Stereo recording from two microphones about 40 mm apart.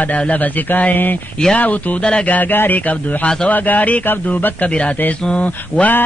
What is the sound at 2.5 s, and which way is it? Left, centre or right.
Speech, left.